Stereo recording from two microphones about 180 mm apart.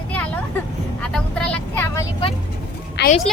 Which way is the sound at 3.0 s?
70° left (ahead or behind).